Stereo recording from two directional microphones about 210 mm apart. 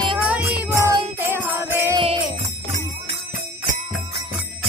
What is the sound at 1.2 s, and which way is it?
Jingle bell, 10° right (ahead or behind).